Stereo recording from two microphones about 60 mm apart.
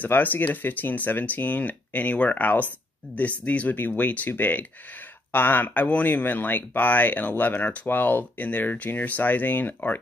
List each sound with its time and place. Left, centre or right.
0.0 s speech: left